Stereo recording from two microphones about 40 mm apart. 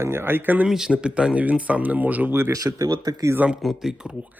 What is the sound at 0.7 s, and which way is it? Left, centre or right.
Speech, centre.